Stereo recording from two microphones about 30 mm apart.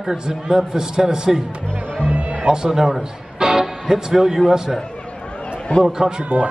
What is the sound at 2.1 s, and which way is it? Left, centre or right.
Music, right.